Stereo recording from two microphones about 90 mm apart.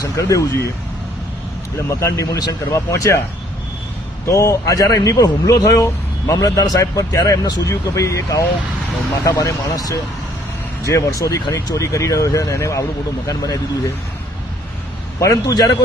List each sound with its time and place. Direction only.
0.0 s speech: 40° left (ahead or behind)
1.9 s speech: 35° left (ahead or behind)
4.3 s speech: 35° left (ahead or behind)
6.3 s a man's voice: 45° left (ahead or behind)
15.2 s speech: 40° left (ahead or behind)